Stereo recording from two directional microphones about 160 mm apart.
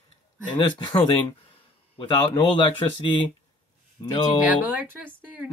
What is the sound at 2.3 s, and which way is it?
Speech, 30° left (ahead or behind).